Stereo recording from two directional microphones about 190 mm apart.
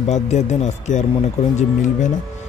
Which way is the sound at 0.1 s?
35° left (ahead or behind).